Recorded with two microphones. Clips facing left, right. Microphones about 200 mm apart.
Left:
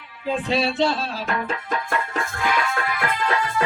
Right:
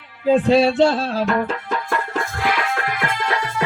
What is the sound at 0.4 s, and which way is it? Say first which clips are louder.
Music: right 5 dB; 40° right (ahead or behind).